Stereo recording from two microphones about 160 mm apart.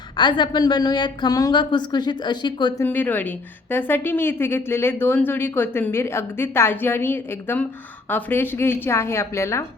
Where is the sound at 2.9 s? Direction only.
10° left (ahead or behind).